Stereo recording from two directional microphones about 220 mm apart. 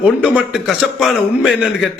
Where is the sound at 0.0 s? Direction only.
5° right (ahead or behind).